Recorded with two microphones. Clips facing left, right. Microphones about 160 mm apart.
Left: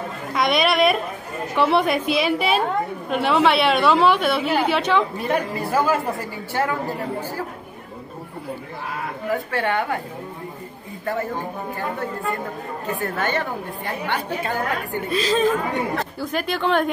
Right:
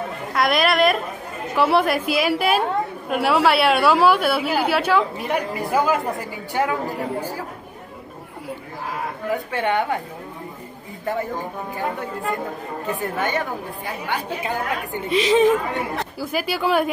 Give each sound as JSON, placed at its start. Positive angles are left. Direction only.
{"t": 0.3, "sound": "a woman's voice", "side_deg": 0}
{"t": 9.3, "sound": "a woman's voice", "side_deg": -20}
{"t": 13.0, "sound": "a woman's voice", "side_deg": -15}
{"t": 16.2, "sound": "a woman's voice", "side_deg": -5}